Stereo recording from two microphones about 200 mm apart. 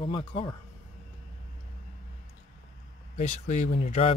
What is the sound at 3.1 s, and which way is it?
Speech, 35° left (ahead or behind).